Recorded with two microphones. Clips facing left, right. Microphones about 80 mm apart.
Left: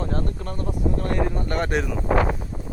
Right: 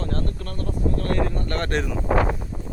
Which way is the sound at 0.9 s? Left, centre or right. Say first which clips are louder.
Even; centre.